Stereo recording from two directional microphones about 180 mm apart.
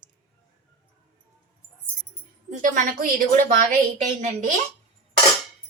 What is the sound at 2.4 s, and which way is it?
A woman's voice, 50° right (ahead or behind).